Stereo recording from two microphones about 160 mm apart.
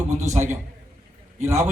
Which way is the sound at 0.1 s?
45° right (ahead or behind).